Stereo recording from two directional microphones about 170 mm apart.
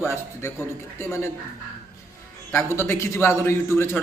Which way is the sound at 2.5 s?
15° left (ahead or behind).